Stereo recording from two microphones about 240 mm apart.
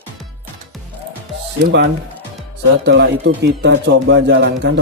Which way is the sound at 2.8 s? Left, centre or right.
Right.